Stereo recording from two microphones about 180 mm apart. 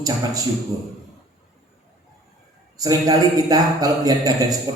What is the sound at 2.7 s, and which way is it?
Speech, 20° right (ahead or behind).